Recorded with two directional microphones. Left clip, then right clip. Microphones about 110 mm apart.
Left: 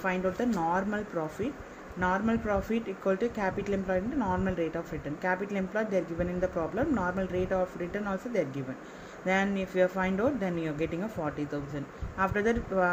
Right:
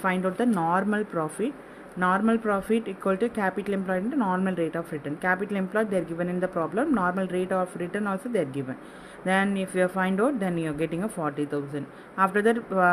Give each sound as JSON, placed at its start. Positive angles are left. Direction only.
{"t": 0.5, "sound": "speech", "side_deg": -90}